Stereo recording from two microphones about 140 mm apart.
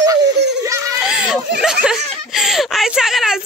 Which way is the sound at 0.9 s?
5° right (ahead or behind).